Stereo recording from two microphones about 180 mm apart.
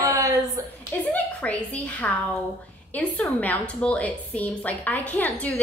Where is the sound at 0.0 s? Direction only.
15° right (ahead or behind).